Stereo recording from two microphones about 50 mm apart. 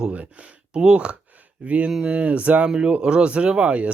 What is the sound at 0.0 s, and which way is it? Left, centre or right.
Speech, right.